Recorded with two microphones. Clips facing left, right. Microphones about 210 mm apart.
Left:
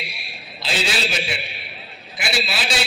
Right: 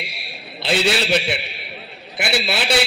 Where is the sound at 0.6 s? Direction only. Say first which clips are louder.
Right 5 dB; 60° right (ahead or behind).